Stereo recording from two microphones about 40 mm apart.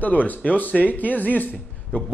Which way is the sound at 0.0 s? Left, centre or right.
Left.